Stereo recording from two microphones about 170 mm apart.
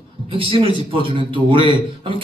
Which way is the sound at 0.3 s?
30° right (ahead or behind).